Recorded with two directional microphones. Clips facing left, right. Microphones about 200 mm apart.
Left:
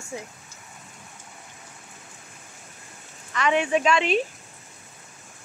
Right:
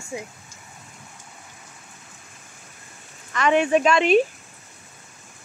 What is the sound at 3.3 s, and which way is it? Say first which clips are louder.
Speech: right 4 dB; 50° right (ahead or behind).